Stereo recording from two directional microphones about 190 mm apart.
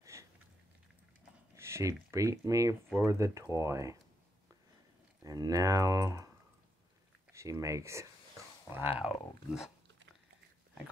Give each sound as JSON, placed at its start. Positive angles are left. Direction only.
{"t": 0.0, "sound": "a sound", "side_deg": -15}
{"t": 1.5, "sound": "speech", "side_deg": -15}
{"t": 5.2, "sound": "speech", "side_deg": -20}
{"t": 7.3, "sound": "speech", "side_deg": -15}